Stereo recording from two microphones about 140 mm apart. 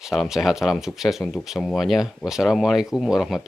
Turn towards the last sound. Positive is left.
turn(degrees=0)  # may be behind; listen again after turning